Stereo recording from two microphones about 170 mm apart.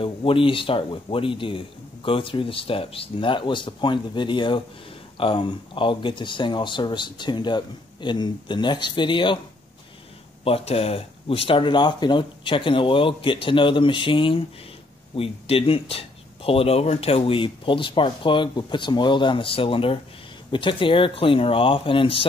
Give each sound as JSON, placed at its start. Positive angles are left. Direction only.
{"t": 0.0, "sound": "speech", "side_deg": 30}
{"t": 10.4, "sound": "speech", "side_deg": 35}